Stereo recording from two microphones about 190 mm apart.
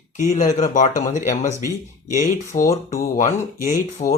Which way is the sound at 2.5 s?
40° left (ahead or behind).